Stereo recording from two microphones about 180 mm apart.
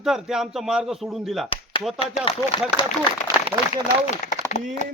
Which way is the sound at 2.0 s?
30° left (ahead or behind).